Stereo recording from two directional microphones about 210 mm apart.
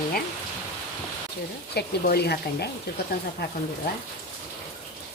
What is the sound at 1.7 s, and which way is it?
Speech, 50° left (ahead or behind).